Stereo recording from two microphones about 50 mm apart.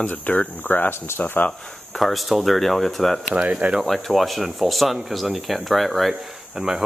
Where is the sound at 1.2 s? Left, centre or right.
Left.